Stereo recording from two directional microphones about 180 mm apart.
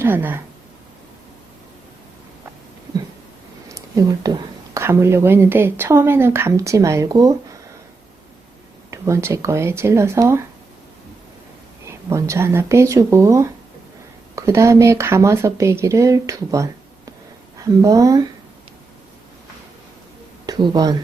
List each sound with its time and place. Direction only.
0.0 s speech: 10° right (ahead or behind)
3.7 s a woman's voice: 15° right (ahead or behind)
8.9 s a woman's voice: 15° right (ahead or behind)
12.0 s a woman's voice: 15° right (ahead or behind)
17.8 s speech: 20° right (ahead or behind)
20.5 s speech: 20° right (ahead or behind)